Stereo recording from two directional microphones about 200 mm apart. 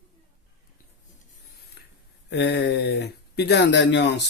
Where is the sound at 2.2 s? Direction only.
60° left (ahead or behind).